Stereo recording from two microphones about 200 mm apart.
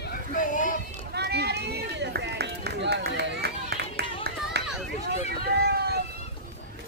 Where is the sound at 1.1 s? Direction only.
55° right (ahead or behind).